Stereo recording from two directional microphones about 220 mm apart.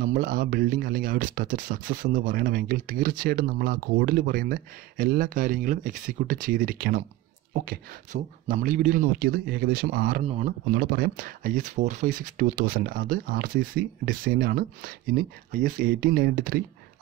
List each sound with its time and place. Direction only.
0.0 s speech: 40° right (ahead or behind)